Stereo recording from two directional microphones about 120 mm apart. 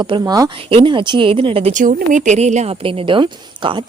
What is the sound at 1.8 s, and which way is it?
Speech, 90° right.